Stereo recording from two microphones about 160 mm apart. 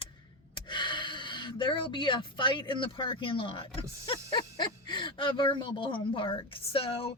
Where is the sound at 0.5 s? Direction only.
30° left (ahead or behind).